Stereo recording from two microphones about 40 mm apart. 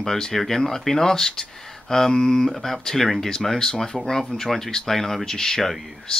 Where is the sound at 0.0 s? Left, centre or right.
Centre.